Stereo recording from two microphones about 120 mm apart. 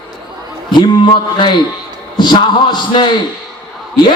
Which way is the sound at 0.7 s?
40° left (ahead or behind).